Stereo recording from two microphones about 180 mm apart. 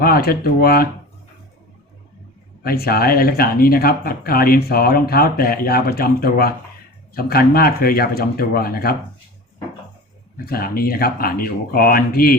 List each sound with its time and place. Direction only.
0.0 s speech: 55° left (ahead or behind)
2.6 s speech: 55° left (ahead or behind)
10.3 s speech: 55° left (ahead or behind)